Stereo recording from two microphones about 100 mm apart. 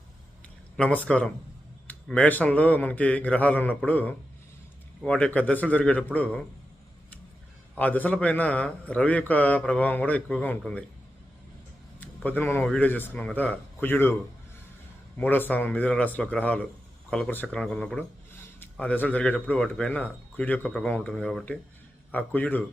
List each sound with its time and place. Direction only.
0.8 s a man's voice: 10° left (ahead or behind)
7.8 s a man's voice: 15° left (ahead or behind)
11.9 s a sound: 15° left (ahead or behind)
12.6 s a man's voice: 15° left (ahead or behind)
15.2 s a man's voice: 20° left (ahead or behind); by 21.4 s 5° left (ahead or behind)
22.1 s a man's voice: 15° left (ahead or behind)